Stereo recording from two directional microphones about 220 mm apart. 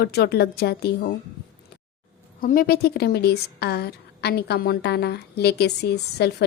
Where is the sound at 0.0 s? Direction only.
45° left (ahead or behind).